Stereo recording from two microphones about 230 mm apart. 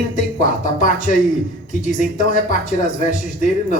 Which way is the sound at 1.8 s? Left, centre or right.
Left.